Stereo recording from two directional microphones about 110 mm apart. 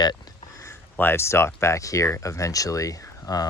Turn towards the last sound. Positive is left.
turn(degrees=30)  # may be behind; listen again after turning